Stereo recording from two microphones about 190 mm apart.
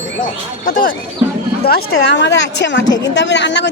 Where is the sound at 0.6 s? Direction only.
50° left (ahead or behind).